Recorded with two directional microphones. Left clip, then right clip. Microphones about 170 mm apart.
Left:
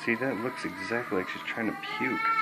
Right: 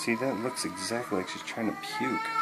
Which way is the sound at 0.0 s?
25° right (ahead or behind).